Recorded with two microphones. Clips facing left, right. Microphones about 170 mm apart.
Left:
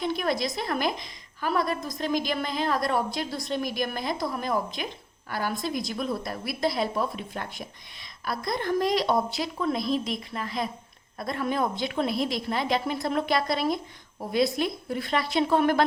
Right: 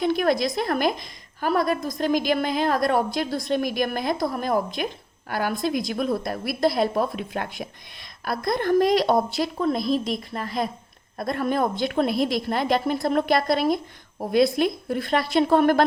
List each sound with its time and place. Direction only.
0.0 s a woman's voice: 55° right (ahead or behind)
5.3 s a woman's voice: 60° right (ahead or behind)
7.2 s a woman's voice: 65° right (ahead or behind); by 15.8 s 50° right (ahead or behind)